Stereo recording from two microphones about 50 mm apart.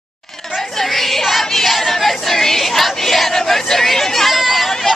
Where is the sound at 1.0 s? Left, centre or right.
Centre.